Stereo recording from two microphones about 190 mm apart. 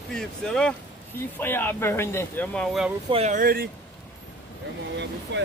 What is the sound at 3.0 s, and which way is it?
Speech, 35° right (ahead or behind).